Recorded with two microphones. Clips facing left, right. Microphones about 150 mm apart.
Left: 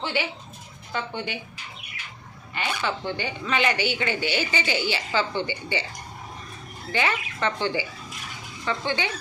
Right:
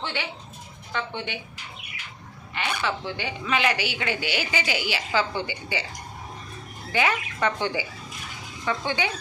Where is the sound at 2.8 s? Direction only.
Centre (ahead or behind).